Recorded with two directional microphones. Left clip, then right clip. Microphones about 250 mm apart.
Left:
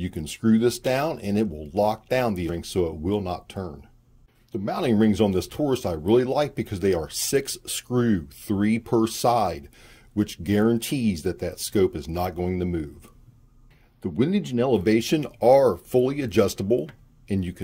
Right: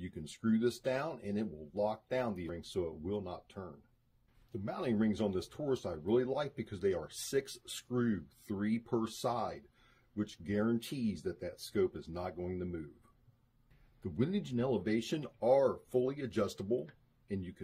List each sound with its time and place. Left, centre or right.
0.0 s speech: left
14.0 s speech: left